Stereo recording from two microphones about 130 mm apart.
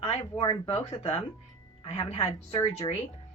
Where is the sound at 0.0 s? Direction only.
50° left (ahead or behind).